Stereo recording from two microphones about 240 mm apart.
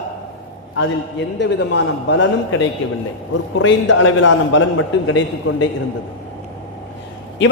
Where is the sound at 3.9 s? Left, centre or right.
Left.